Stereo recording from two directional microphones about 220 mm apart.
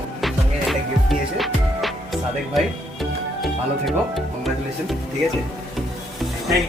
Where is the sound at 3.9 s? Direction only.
Centre (ahead or behind).